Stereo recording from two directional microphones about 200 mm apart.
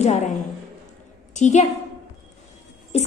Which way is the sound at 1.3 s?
35° left (ahead or behind).